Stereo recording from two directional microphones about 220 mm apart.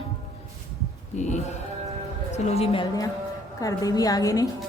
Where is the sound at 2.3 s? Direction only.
30° left (ahead or behind).